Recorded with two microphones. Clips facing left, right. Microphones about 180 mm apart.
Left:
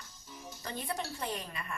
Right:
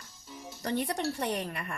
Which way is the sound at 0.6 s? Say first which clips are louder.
Right 8 dB; 70° right (ahead or behind).